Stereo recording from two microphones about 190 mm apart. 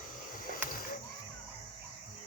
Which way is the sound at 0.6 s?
50° left (ahead or behind).